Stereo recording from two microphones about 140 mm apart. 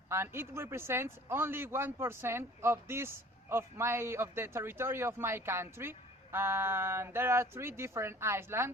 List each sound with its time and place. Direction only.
0.1 s a man's voice: 20° right (ahead or behind)